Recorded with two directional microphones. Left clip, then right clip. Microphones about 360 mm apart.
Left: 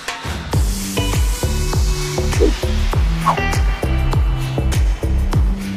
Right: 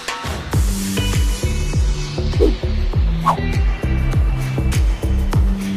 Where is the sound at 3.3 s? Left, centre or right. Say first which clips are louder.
Left 1 dB; centre.